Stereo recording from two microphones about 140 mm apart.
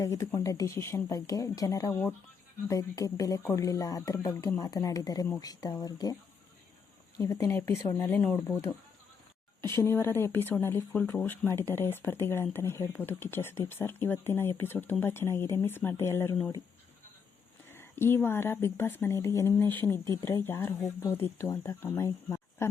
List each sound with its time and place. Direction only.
0.0 s speech: 20° left (ahead or behind)
1.9 s speech: 15° left (ahead or behind)
2.6 s speech: 25° left (ahead or behind)
7.2 s speech: 20° left (ahead or behind)
17.7 s speech: 15° left (ahead or behind)